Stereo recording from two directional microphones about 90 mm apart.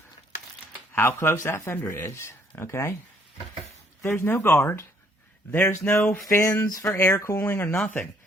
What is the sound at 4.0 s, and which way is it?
Speech, 25° left (ahead or behind).